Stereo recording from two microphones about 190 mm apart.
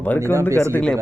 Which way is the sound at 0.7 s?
5° left (ahead or behind).